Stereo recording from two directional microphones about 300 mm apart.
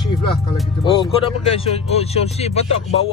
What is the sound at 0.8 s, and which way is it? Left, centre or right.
Speech, centre.